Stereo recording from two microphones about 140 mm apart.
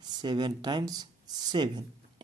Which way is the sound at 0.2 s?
30° right (ahead or behind).